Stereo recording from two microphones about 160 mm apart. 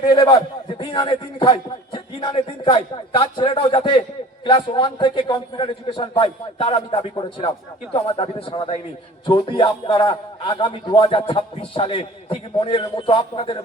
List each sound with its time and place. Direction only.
0.0 s a man's voice: 30° left (ahead or behind)